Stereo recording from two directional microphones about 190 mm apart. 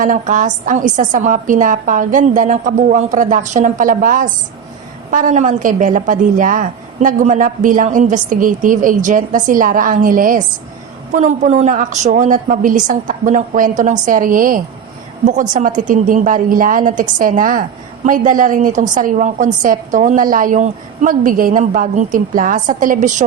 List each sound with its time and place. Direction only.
0.0 s a woman's voice: 45° right (ahead or behind)